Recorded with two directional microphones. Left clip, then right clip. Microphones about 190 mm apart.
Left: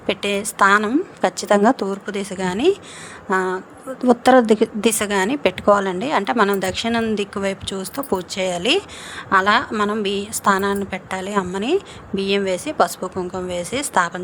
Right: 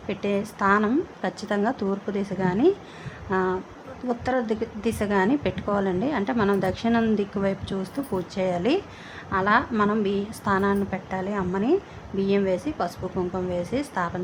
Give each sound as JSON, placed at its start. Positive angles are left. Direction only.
{"t": 0.1, "sound": "a woman's voice", "side_deg": 45}